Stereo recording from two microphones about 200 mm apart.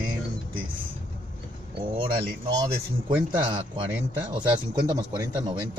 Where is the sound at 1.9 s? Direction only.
25° right (ahead or behind).